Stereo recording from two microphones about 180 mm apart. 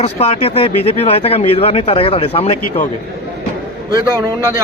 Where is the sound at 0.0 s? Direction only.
35° left (ahead or behind).